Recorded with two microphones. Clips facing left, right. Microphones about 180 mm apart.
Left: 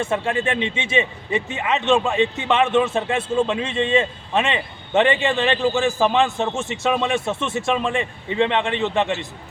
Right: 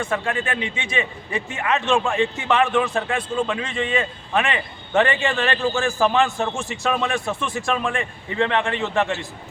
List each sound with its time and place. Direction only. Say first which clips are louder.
0.0 s a man's voice: left 3 dB; 25° left (ahead or behind)